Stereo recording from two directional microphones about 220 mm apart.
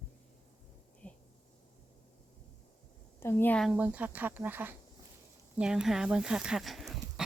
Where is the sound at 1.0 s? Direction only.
5° left (ahead or behind).